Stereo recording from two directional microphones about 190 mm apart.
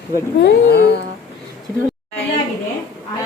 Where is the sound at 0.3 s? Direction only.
60° left (ahead or behind).